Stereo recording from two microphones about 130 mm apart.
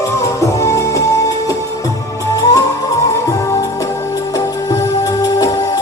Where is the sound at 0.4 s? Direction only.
20° left (ahead or behind).